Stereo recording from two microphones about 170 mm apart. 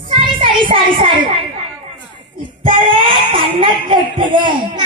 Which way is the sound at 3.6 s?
30° right (ahead or behind).